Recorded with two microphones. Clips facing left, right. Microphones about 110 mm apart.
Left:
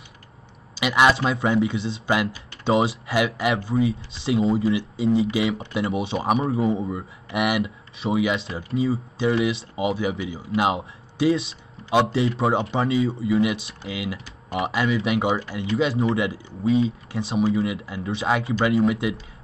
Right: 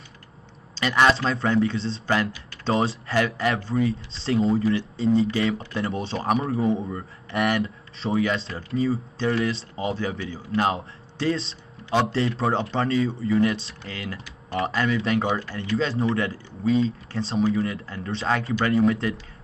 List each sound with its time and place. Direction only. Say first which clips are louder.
0.7 s speech: left 1 dB; 10° left (ahead or behind)